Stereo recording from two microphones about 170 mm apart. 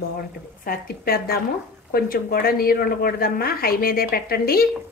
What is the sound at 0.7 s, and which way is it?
A woman's voice, 65° left (ahead or behind).